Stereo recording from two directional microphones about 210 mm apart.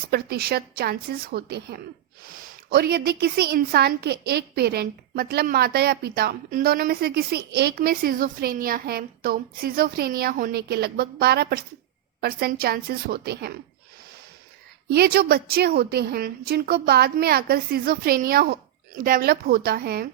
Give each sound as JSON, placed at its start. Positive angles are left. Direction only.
{"t": 0.1, "sound": "a woman's voice", "side_deg": -50}
{"t": 14.8, "sound": "a woman's voice", "side_deg": -50}